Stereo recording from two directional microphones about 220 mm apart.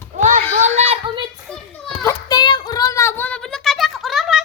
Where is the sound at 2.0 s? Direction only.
15° left (ahead or behind); by 4.4 s centre (ahead or behind).